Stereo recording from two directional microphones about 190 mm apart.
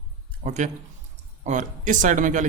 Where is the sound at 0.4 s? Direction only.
35° right (ahead or behind).